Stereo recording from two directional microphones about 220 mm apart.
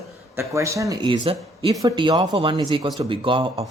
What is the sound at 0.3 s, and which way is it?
Speech, 15° right (ahead or behind).